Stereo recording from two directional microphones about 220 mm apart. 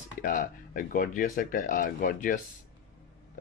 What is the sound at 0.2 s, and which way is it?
Speech, 35° left (ahead or behind).